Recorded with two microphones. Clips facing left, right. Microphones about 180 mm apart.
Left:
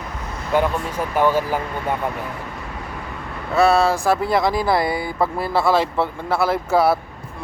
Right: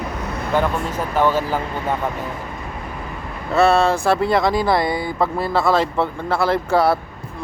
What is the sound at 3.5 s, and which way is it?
Speech, centre (ahead or behind).